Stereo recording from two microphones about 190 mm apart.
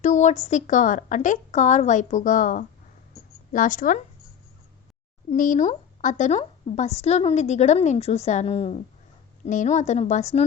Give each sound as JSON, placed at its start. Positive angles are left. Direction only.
{"t": 0.0, "sound": "a woman's voice", "side_deg": 40}
{"t": 5.3, "sound": "a woman's voice", "side_deg": 40}